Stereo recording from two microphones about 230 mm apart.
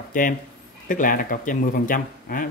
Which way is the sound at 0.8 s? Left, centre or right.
Left.